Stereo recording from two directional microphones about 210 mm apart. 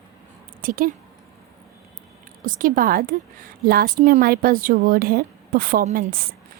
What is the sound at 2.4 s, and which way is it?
A woman's voice, 40° right (ahead or behind).